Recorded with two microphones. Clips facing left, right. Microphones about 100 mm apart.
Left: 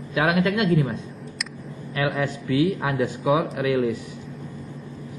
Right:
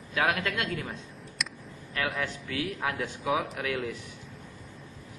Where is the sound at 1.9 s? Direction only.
5° left (ahead or behind).